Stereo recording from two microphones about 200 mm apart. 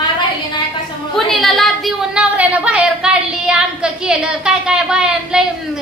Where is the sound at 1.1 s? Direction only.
Centre (ahead or behind).